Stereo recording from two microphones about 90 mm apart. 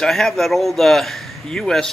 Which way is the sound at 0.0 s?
5° left (ahead or behind).